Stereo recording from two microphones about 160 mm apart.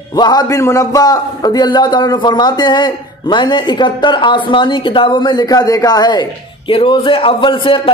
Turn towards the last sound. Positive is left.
turn(degrees=30)  # may be behind; listen again after turning